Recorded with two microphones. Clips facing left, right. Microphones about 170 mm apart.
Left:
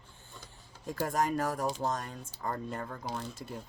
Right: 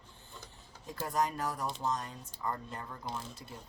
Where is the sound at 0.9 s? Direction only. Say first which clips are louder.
Left 3 dB; 50° left (ahead or behind).